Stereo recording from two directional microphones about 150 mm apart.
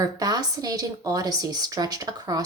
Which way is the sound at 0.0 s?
25° right (ahead or behind).